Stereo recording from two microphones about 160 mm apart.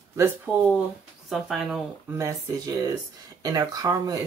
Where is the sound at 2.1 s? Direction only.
20° right (ahead or behind).